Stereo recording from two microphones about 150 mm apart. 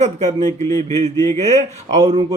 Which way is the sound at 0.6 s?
25° left (ahead or behind).